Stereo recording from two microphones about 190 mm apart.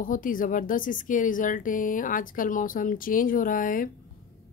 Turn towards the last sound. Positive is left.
turn(degrees=45)  # may be behind; listen again after turning